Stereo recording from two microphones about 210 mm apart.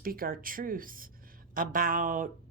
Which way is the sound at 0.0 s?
45° right (ahead or behind).